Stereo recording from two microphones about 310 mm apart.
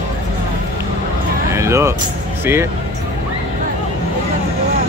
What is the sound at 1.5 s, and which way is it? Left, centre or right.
Music, centre.